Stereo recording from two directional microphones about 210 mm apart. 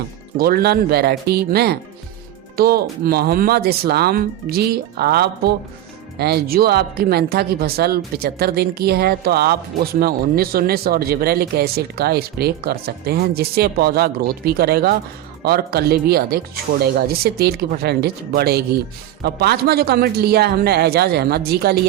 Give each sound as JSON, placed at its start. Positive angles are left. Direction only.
{"t": 0.3, "sound": "speech", "side_deg": -45}